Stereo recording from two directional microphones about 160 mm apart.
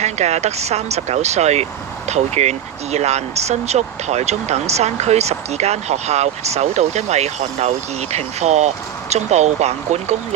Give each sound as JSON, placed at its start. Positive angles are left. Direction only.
{"t": 0.0, "sound": "speech", "side_deg": -45}